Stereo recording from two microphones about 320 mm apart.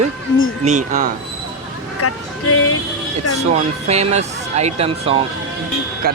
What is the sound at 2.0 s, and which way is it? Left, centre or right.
Speech, left.